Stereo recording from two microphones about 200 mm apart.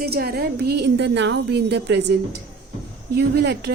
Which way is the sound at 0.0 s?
50° right (ahead or behind).